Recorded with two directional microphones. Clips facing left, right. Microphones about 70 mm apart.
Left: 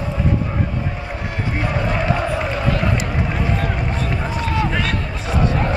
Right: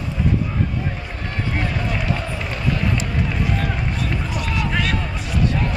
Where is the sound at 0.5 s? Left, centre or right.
Left.